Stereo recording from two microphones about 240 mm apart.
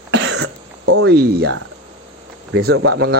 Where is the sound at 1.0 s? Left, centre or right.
Right.